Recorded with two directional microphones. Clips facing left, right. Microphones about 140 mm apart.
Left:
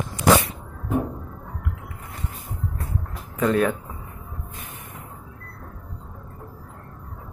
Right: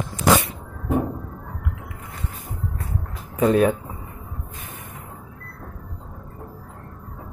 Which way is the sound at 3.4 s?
20° right (ahead or behind).